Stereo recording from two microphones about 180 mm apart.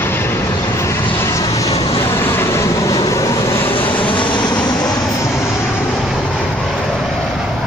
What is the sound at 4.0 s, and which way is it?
Vehicle, 25° left (ahead or behind).